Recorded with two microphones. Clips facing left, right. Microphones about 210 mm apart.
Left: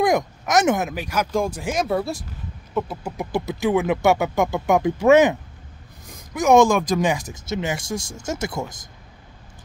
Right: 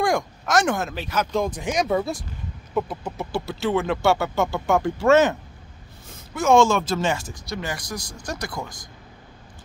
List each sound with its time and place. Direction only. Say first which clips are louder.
0.0 s speech: left 3 dB; 20° left (ahead or behind)
3.3 s speech: left 3 dB; 20° left (ahead or behind)